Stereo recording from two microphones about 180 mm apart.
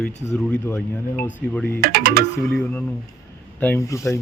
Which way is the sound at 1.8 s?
60° right (ahead or behind).